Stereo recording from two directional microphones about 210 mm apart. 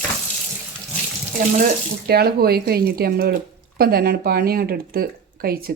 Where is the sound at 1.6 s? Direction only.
50° right (ahead or behind).